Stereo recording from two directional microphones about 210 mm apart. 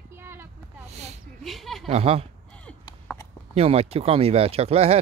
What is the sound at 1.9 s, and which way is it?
Speech, 30° right (ahead or behind).